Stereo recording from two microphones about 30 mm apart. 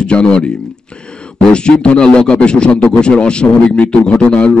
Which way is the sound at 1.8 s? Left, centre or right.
Left.